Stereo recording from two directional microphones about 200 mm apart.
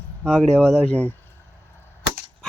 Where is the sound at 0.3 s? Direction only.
5° left (ahead or behind).